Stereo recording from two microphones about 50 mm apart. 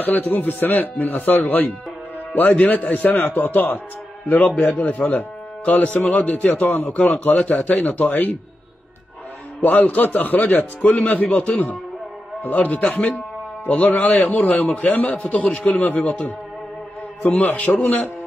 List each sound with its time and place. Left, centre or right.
0.0 s a man's voice: left
9.6 s a man's voice: left
17.2 s a man's voice: left